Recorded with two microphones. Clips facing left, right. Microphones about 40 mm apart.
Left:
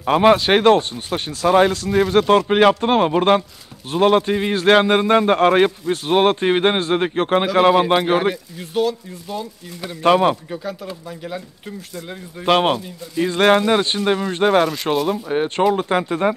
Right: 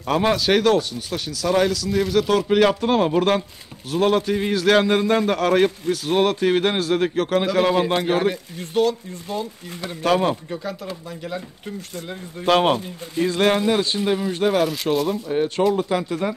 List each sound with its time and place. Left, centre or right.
0.0 s a man's voice: left
8.5 s speech: centre
10.0 s speech: left
10.5 s speech: centre
12.4 s speech: left
12.7 s speech: right
13.4 s a man's voice: left